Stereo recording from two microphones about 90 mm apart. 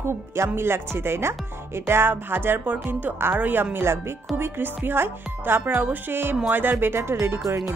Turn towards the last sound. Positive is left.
turn(degrees=-30)  # may be behind; listen again after turning